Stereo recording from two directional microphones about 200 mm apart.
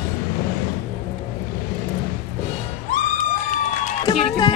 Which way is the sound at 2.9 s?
40° left (ahead or behind).